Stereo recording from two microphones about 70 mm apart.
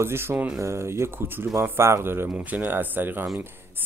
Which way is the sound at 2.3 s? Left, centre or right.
Right.